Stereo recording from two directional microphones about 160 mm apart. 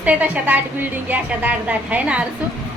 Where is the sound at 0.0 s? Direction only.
10° right (ahead or behind).